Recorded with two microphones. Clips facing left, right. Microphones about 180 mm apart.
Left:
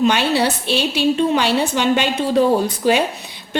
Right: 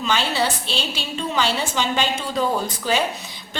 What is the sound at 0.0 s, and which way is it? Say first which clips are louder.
A woman's voice: left 6 dB; 60° left (ahead or behind).